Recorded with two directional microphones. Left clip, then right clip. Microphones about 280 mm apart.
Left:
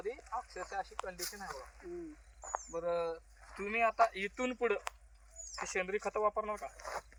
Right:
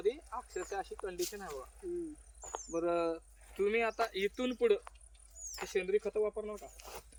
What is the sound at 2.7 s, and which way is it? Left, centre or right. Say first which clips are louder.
Speech: right 3 dB; centre.